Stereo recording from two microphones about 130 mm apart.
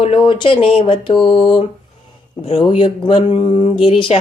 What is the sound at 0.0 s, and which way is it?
Speech, 45° left (ahead or behind).